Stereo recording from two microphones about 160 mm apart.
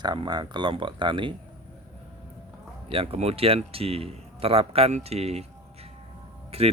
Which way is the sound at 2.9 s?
40° right (ahead or behind).